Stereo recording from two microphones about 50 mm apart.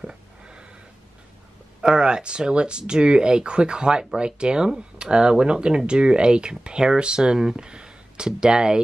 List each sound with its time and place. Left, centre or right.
0.0 s sniff: centre
1.8 s speech: centre